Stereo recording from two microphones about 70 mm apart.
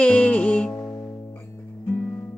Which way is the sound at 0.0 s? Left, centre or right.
Centre.